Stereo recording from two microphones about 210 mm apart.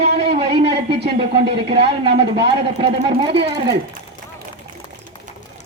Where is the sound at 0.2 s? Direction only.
30° right (ahead or behind).